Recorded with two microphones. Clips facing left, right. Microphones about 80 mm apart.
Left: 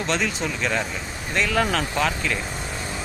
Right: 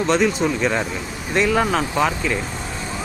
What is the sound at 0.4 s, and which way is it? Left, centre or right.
Speech, centre.